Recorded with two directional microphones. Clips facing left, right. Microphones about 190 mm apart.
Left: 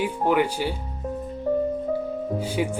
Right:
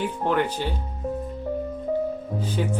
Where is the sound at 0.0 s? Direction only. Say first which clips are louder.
Left 2 dB; 10° left (ahead or behind).